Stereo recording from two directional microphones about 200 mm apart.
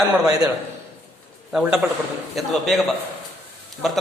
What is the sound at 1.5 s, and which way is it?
Speech, 5° right (ahead or behind).